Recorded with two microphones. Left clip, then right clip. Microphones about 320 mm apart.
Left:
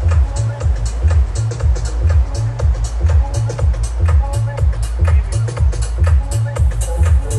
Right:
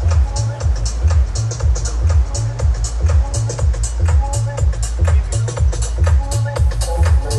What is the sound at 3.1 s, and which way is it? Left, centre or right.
Music, right.